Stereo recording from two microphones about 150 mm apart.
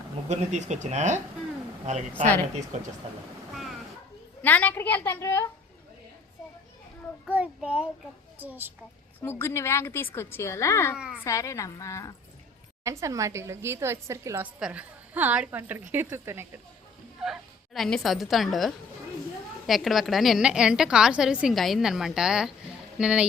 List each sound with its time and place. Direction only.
0.3 s speech: 50° right (ahead or behind)
4.4 s a woman's voice: 10° left (ahead or behind)
7.3 s a woman's voice: 10° right (ahead or behind)
9.2 s a woman's voice: 15° left (ahead or behind)
10.9 s a woman's voice: 5° right (ahead or behind)
11.2 s a woman's voice: 20° left (ahead or behind)
12.8 s a woman's voice: 20° right (ahead or behind)
17.7 s a woman's voice: centre (ahead or behind)